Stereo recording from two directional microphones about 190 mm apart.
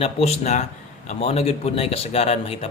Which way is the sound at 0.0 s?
35° left (ahead or behind).